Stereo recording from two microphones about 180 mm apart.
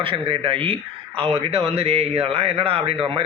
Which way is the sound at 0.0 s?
30° right (ahead or behind).